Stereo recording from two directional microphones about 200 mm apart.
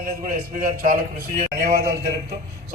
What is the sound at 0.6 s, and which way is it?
A man's voice, 45° right (ahead or behind).